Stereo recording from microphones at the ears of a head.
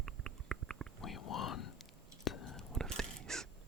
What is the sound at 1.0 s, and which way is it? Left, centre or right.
Whispering, left.